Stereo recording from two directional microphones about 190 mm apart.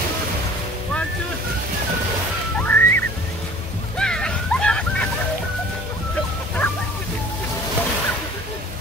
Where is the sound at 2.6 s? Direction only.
10° left (ahead or behind).